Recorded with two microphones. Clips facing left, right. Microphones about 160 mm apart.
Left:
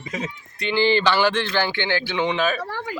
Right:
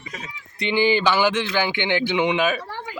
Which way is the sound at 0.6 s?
15° right (ahead or behind).